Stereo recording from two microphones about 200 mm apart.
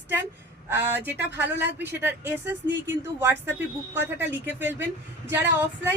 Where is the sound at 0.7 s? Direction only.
10° right (ahead or behind).